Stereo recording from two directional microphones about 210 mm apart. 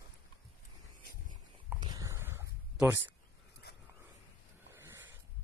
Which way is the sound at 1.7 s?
20° right (ahead or behind).